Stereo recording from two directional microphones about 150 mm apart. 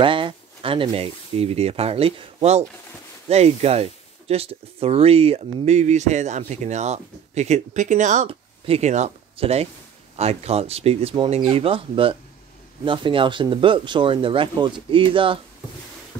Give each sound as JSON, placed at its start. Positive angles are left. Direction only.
{"t": 0.0, "sound": "speech", "side_deg": -35}
{"t": 8.3, "sound": "speech", "side_deg": -40}